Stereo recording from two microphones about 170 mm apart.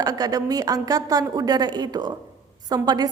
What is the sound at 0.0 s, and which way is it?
A woman's voice, 20° right (ahead or behind).